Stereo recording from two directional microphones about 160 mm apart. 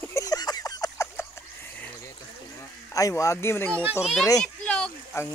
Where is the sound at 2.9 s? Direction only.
20° left (ahead or behind).